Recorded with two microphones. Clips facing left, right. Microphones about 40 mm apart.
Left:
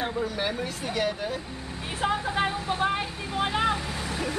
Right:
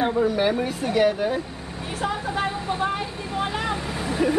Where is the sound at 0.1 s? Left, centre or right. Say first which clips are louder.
Right 8 dB; centre.